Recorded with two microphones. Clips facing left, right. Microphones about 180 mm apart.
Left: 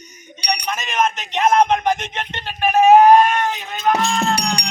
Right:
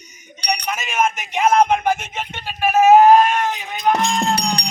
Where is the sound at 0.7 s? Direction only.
10° right (ahead or behind).